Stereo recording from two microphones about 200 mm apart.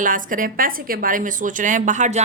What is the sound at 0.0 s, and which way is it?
A woman's voice, 40° right (ahead or behind).